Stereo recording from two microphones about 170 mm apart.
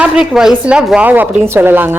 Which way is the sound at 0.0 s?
5° right (ahead or behind).